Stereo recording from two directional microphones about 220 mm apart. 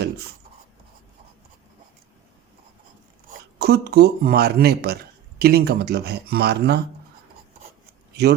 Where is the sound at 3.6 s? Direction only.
45° right (ahead or behind).